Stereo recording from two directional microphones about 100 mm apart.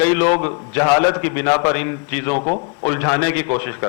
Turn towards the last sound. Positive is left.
turn(degrees=30)  # may be behind; listen again after turning